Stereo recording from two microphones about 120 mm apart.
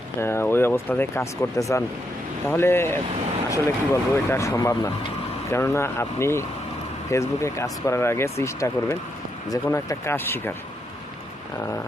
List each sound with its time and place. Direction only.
0.2 s speech: 20° left (ahead or behind)